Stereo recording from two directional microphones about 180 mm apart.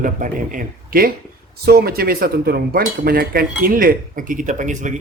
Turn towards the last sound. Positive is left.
turn(degrees=-45)  # may be behind; listen again after turning